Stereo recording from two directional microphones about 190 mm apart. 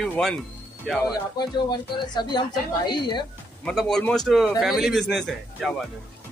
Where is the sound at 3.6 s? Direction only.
5° left (ahead or behind).